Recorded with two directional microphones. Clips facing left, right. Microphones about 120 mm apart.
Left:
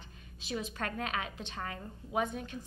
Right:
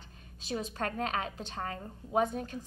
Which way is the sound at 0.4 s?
40° right (ahead or behind).